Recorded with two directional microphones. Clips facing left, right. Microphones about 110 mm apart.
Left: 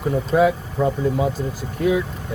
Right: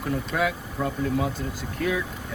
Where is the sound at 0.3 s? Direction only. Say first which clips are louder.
Left 9 dB; 30° left (ahead or behind).